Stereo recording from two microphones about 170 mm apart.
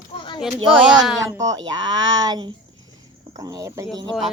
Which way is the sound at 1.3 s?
20° right (ahead or behind).